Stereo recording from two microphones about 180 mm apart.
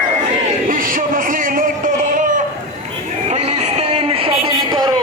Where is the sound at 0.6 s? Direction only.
50° right (ahead or behind).